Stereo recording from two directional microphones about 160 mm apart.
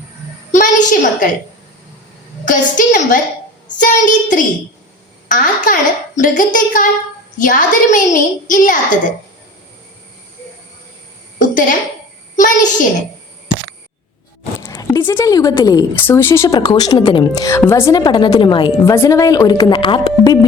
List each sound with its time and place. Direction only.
0.5 s a sound: 50° left (ahead or behind)
2.4 s a woman's voice: 55° left (ahead or behind)
11.3 s a sound: 55° left (ahead or behind)
12.4 s a child's voice: 55° left (ahead or behind)
14.6 s a sound: 25° left (ahead or behind)
16.0 s speech: 15° left (ahead or behind)
16.6 s a woman's voice: 30° left (ahead or behind)
17.0 s speech: 40° left (ahead or behind)
17.3 s a woman's voice: 20° left (ahead or behind)